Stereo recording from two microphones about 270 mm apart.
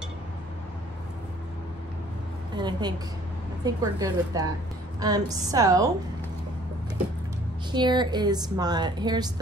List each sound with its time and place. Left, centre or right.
2.5 s a woman's voice: centre
7.7 s a woman's voice: centre